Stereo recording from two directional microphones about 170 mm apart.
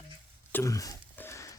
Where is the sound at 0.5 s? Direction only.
20° left (ahead or behind).